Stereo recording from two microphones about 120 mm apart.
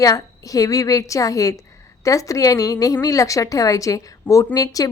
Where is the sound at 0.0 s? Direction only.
30° left (ahead or behind).